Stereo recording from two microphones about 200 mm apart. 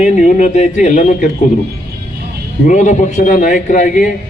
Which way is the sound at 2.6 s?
35° left (ahead or behind).